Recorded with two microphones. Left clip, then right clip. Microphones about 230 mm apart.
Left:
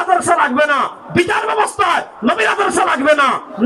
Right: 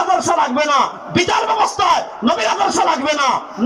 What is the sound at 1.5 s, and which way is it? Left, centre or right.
Speech, left.